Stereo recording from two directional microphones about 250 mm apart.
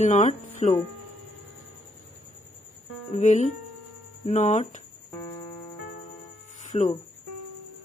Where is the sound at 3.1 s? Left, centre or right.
Left.